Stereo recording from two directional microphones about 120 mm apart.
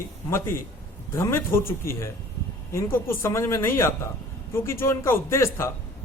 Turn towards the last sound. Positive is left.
turn(degrees=20)  # may be behind; listen again after turning